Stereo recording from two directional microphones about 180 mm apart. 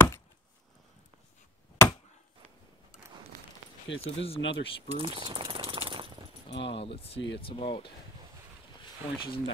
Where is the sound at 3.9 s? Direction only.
90° left.